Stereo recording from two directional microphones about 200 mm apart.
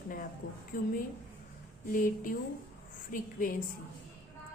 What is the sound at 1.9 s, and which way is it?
Speech, 45° left (ahead or behind).